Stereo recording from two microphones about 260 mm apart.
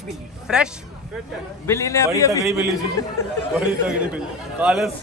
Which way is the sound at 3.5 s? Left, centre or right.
Centre.